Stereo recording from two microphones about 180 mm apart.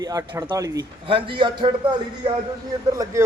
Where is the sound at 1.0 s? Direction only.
30° right (ahead or behind).